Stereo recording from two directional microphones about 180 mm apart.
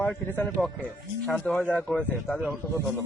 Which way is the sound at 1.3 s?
5° left (ahead or behind).